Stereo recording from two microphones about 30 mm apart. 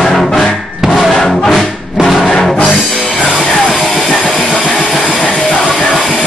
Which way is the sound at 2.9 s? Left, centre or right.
Centre.